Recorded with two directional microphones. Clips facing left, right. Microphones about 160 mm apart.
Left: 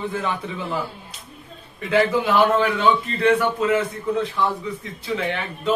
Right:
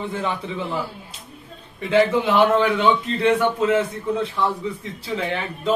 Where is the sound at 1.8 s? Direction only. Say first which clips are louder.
Right 1 dB; 25° right (ahead or behind).